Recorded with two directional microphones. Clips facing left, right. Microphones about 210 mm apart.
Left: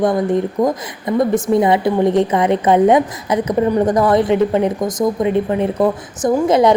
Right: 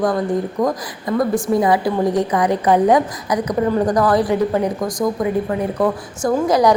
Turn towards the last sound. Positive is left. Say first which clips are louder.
# left 2 dB
turn(degrees=25)  # may be behind; listen again after turning